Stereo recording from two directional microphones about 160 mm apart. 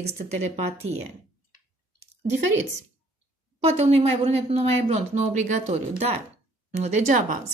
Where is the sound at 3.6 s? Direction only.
40° right (ahead or behind).